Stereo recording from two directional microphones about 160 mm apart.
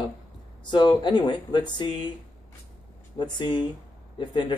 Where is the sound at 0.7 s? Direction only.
30° left (ahead or behind).